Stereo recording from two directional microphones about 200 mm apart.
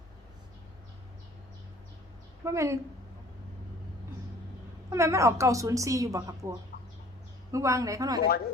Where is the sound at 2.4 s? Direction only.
15° right (ahead or behind).